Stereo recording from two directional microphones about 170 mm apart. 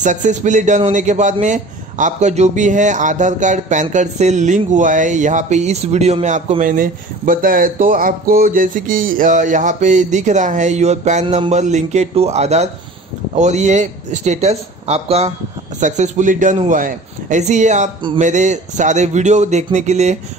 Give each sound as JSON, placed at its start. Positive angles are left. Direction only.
{"t": 0.0, "sound": "a man's voice", "side_deg": -45}